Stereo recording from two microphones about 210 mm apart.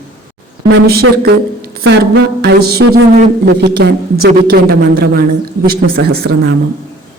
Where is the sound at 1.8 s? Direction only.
50° right (ahead or behind).